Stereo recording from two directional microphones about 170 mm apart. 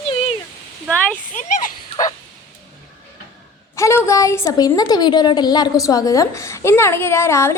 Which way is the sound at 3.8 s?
15° left (ahead or behind).